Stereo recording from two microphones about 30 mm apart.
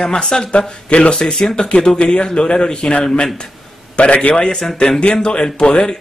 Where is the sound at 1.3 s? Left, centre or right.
Left.